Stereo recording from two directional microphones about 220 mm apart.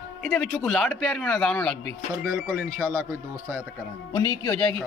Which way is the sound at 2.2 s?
15° right (ahead or behind).